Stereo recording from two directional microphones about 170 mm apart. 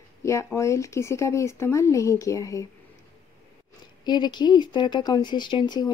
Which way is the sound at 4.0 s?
25° left (ahead or behind).